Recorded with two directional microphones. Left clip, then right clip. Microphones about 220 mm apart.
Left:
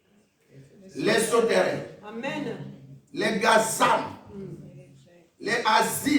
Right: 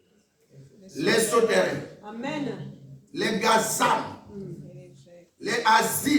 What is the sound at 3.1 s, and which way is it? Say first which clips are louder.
Speech: left 1 dB; centre (ahead or behind).